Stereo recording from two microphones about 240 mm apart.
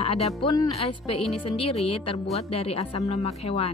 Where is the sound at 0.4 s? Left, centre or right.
Left.